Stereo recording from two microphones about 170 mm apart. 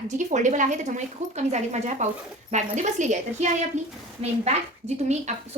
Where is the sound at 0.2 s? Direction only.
45° right (ahead or behind).